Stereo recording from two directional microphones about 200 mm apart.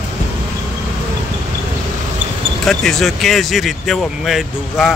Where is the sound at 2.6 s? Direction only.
5° left (ahead or behind).